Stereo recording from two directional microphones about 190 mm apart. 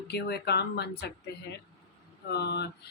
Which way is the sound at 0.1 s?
60° left (ahead or behind).